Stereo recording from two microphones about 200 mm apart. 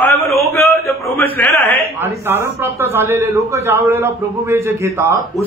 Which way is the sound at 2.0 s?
15° right (ahead or behind).